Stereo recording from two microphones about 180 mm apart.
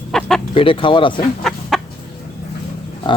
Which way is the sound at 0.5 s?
30° left (ahead or behind).